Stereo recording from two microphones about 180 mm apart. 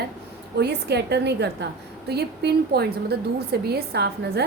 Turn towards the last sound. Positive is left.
turn(degrees=-65)  # may be behind; listen again after turning